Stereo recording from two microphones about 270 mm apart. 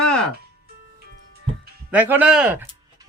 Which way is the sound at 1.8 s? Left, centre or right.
Centre.